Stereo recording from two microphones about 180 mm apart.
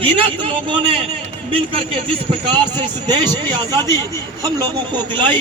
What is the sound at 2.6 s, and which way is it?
Speech, 25° right (ahead or behind).